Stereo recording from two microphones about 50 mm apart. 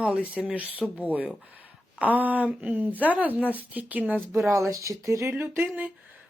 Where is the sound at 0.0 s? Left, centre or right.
Right.